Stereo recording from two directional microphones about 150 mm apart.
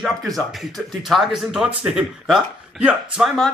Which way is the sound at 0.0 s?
Centre (ahead or behind).